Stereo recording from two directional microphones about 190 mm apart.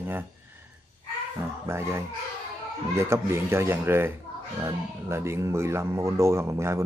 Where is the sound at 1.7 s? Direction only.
15° right (ahead or behind).